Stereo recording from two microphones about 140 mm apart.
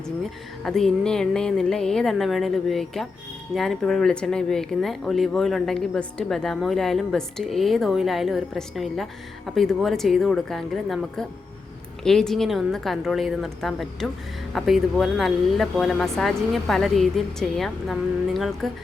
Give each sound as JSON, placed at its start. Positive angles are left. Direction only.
{"t": 0.6, "sound": "speech", "side_deg": 5}